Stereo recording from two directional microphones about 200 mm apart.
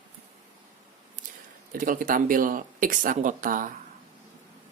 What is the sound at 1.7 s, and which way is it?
Speech, 45° right (ahead or behind).